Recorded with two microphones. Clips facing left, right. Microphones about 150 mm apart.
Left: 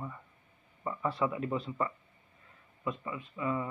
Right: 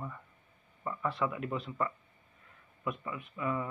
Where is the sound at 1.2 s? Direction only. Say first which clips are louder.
Left 3 dB; 25° left (ahead or behind).